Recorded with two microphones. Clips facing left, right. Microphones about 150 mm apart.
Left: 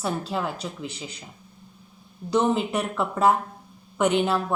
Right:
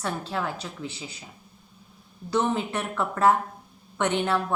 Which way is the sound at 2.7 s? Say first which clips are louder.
Left 3 dB; 5° left (ahead or behind).